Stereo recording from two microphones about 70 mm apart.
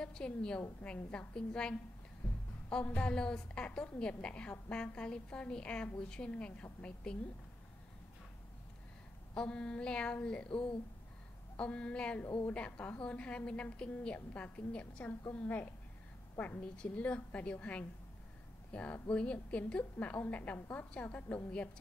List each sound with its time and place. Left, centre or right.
0.0 s a woman's voice: centre
9.3 s a woman's voice: centre